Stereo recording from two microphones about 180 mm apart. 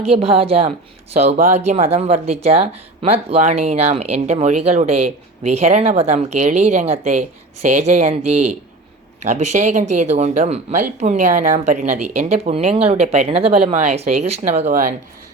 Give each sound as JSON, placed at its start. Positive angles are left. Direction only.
{"t": 0.0, "sound": "speech", "side_deg": -35}